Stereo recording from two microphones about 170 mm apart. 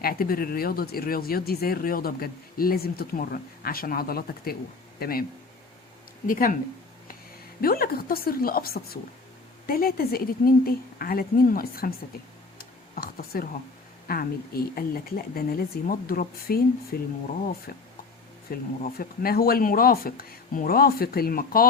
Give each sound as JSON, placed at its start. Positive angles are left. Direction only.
{"t": 0.0, "sound": "speech", "side_deg": 60}
{"t": 6.2, "sound": "speech", "side_deg": 55}
{"t": 7.6, "sound": "speech", "side_deg": 60}
{"t": 12.5, "sound": "a sound", "side_deg": 60}
{"t": 14.1, "sound": "speech", "side_deg": 60}